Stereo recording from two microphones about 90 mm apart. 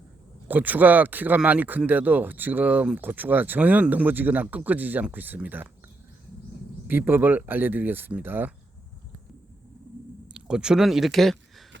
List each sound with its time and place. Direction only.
0.4 s speech: 20° right (ahead or behind)
6.8 s speech: 20° right (ahead or behind)
10.3 s speech: 10° right (ahead or behind)